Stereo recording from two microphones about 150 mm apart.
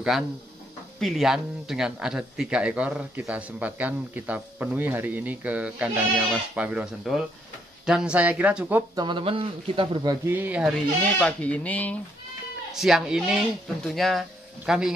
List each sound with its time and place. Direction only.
0.9 s speech: centre (ahead or behind)
8.9 s speech: 30° right (ahead or behind)
10.2 s speech: 15° right (ahead or behind)
11.0 s speech: 10° left (ahead or behind)
12.7 s speech: 5° right (ahead or behind)